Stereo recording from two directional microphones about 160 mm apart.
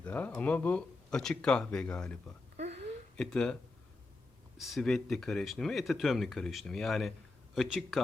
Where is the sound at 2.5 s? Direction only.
45° right (ahead or behind).